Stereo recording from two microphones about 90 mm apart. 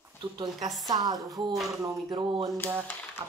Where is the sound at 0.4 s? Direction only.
45° right (ahead or behind).